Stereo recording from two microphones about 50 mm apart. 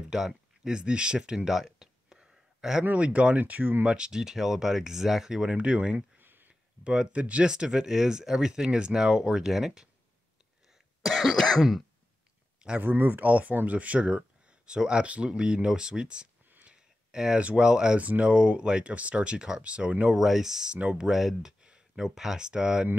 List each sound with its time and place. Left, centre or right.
0.1 s speech: centre
1.5 s a sound: centre
3.0 s speech: right
3.8 s speech: centre
5.5 s speech: right
6.1 s a sound: right
6.8 s speech: centre
11.0 s cough: centre
12.8 s speech: right; by 16.3 s centre
16.6 s a sound: centre
17.4 s speech: right
20.2 s speech: centre
21.1 s speech: centre
21.4 s speech: centre